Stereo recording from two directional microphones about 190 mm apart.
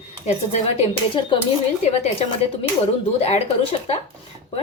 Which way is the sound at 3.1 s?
35° left (ahead or behind).